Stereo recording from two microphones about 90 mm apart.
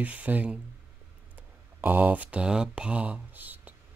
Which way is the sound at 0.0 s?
15° right (ahead or behind).